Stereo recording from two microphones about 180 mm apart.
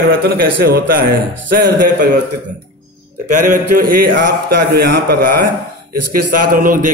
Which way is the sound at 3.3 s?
50° right (ahead or behind).